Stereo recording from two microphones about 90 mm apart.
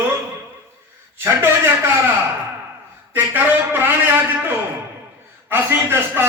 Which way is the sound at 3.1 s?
25° right (ahead or behind).